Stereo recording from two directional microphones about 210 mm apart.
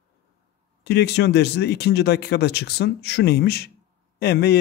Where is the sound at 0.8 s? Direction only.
50° left (ahead or behind).